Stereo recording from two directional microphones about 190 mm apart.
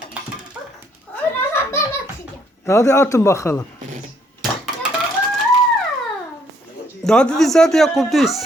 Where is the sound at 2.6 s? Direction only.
15° left (ahead or behind).